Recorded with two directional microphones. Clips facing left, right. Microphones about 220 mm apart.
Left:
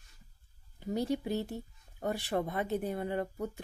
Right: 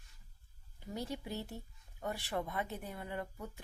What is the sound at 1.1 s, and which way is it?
Speech, 35° left (ahead or behind).